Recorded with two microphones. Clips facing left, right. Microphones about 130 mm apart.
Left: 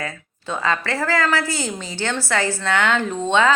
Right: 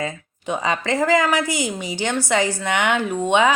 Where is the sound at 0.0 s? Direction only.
15° right (ahead or behind).